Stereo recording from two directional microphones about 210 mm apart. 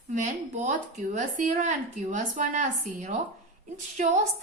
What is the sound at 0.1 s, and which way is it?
Speech, 35° right (ahead or behind).